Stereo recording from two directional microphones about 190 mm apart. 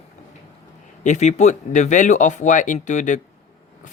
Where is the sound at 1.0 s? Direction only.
40° left (ahead or behind).